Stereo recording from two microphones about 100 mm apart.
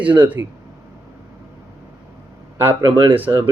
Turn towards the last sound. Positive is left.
turn(degrees=-20)  # may be behind; listen again after turning